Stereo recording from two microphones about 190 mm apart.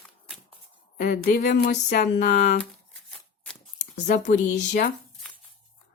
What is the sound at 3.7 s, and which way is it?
Speech, 40° left (ahead or behind).